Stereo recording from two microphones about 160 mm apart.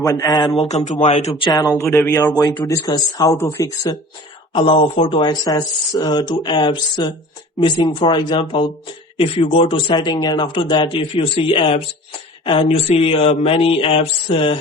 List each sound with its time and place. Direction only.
0.0 s speech: 20° left (ahead or behind)
0.7 s speech: 45° left (ahead or behind)
1.5 s speech: 20° left (ahead or behind)
4.5 s speech: 30° left (ahead or behind)